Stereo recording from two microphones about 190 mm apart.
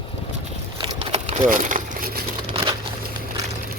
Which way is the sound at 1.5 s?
45° right (ahead or behind).